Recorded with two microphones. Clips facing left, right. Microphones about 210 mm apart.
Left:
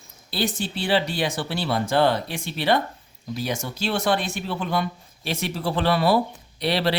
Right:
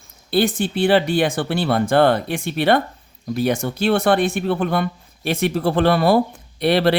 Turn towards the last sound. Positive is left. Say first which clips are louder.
# right 7 dB
turn(degrees=-55)  # may be behind; listen again after turning